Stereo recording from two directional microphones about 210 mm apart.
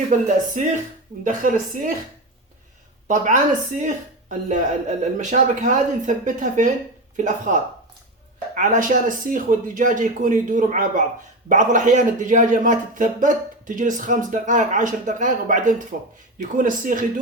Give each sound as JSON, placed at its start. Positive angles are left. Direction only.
{"t": 0.1, "sound": "speech", "side_deg": -40}
{"t": 3.1, "sound": "speech", "side_deg": -35}